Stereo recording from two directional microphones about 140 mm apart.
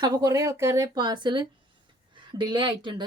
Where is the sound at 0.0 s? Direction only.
25° right (ahead or behind).